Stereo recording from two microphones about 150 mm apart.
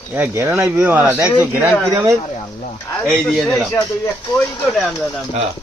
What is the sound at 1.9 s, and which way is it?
Speech, 20° right (ahead or behind).